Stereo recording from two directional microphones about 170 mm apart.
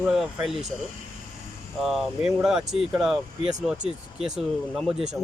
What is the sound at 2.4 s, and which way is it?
Speech, 5° right (ahead or behind).